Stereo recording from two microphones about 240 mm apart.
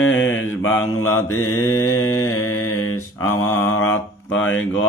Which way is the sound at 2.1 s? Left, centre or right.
Centre.